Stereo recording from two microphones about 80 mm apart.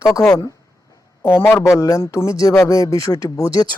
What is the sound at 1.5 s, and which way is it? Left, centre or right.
A man's voice, left.